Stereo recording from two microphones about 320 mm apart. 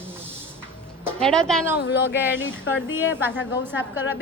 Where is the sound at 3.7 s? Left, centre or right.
Left.